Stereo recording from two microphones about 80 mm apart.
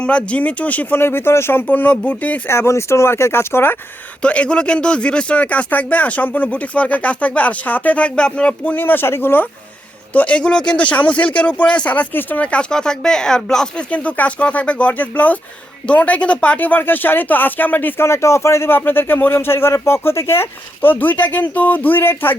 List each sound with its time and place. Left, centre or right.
0.0 s speech: centre
2.5 s speech: left
4.2 s speech: centre